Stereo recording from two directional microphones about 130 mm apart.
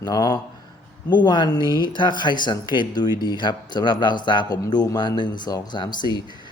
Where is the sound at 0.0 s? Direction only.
30° left (ahead or behind).